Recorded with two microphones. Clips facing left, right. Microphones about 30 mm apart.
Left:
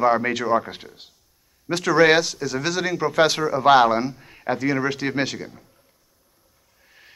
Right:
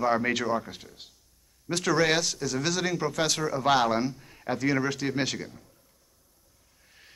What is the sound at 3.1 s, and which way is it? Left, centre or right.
Speech, left.